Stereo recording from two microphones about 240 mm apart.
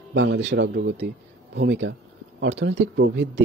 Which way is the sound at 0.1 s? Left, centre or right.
Right.